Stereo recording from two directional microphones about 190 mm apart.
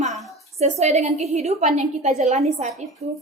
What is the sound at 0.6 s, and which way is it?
A woman's voice, 35° right (ahead or behind).